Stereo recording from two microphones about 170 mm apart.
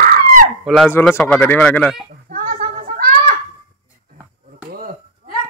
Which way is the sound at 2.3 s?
60° right (ahead or behind).